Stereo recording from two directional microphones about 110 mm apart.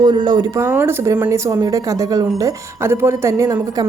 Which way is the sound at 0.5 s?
25° right (ahead or behind).